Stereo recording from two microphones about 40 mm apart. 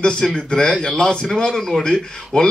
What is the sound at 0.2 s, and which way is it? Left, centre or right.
A man's voice, centre.